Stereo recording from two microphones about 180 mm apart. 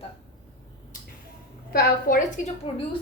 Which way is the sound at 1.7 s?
55° left (ahead or behind).